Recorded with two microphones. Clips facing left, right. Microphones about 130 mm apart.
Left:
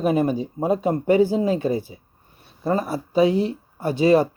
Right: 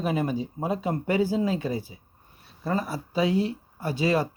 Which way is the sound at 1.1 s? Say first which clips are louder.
Left 3 dB; 30° left (ahead or behind).